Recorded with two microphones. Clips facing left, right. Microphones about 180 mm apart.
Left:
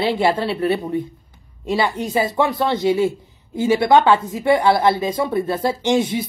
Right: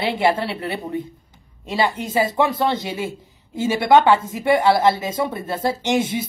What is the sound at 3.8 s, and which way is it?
Speech, 25° right (ahead or behind).